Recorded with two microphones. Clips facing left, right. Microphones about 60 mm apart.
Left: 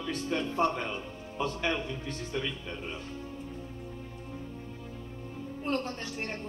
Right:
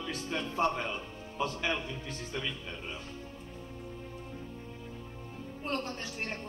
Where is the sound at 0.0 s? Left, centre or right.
Centre.